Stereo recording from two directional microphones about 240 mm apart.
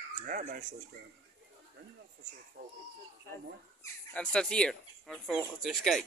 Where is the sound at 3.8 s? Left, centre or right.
Centre.